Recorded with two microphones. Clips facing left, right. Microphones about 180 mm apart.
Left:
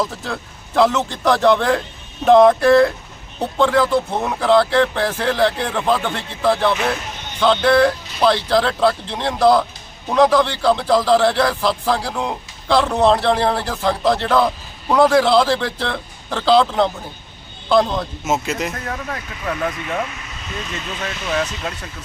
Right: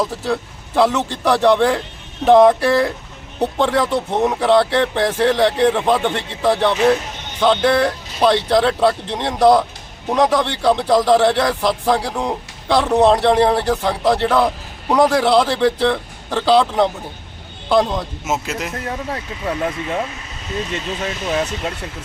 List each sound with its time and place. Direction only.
0.0 s a man's voice: 10° right (ahead or behind)
18.9 s speech: 25° right (ahead or behind)